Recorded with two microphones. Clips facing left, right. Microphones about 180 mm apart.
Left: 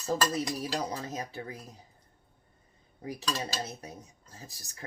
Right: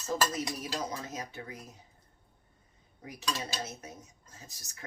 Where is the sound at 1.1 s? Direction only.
35° left (ahead or behind).